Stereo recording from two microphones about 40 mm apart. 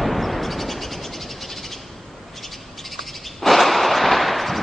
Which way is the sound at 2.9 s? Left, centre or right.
Centre.